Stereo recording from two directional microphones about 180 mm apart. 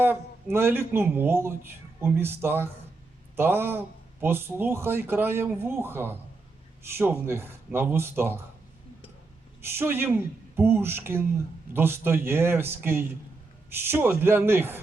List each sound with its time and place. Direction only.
0.0 s speech: 10° right (ahead or behind)
9.6 s speech: 15° right (ahead or behind)